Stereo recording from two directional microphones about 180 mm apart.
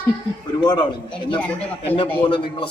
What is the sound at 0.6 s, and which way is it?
Speech, 25° left (ahead or behind).